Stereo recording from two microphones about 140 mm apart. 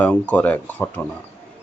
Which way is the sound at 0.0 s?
10° left (ahead or behind).